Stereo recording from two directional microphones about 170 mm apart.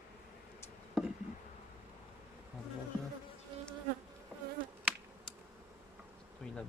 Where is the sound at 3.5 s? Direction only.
30° right (ahead or behind).